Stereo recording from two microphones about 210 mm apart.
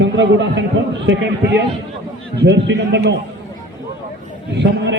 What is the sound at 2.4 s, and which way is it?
Speech, 55° right (ahead or behind).